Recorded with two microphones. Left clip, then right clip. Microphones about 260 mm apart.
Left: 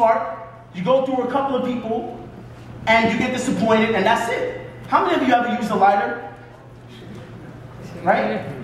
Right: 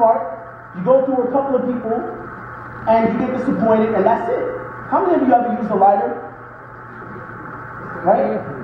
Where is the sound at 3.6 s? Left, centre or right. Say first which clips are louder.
Right 2 dB; left.